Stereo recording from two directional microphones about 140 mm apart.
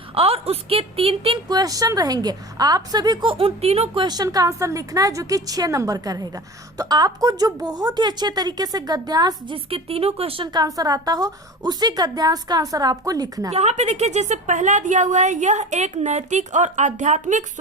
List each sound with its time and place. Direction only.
0.1 s a woman's voice: 45° right (ahead or behind)
1.5 s a woman's voice: 25° right (ahead or behind); by 4.0 s 45° right (ahead or behind)
4.0 s a woman's voice: 30° right (ahead or behind)
9.6 s a woman's voice: 45° right (ahead or behind); by 13.5 s 25° right (ahead or behind)
13.5 s a woman's voice: 50° right (ahead or behind)